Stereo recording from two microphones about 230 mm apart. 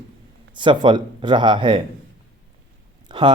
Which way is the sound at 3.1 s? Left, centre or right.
Centre.